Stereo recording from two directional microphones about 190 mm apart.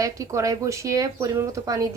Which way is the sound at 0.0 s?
15° right (ahead or behind).